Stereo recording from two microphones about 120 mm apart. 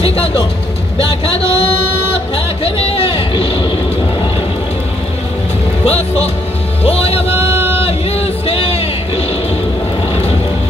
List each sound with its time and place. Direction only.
0.9 s speech: 55° left (ahead or behind)
2.3 s a sound: 55° left (ahead or behind)
5.9 s speech: 60° left (ahead or behind)
6.8 s music: 55° left (ahead or behind)
7.2 s a sound: 20° right (ahead or behind)
7.8 s music: 55° left (ahead or behind)